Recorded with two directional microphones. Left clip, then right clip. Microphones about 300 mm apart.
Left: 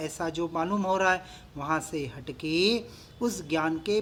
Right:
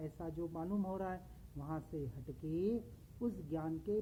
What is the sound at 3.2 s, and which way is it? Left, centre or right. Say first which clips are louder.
Speech: left 14 dB; centre.